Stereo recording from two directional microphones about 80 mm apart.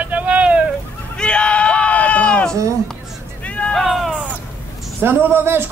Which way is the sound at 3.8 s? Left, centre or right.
Centre.